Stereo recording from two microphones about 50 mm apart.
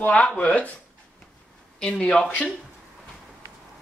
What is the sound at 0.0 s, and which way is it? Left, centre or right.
Speech, left.